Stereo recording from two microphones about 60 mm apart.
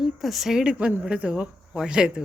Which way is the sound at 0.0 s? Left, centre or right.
Centre.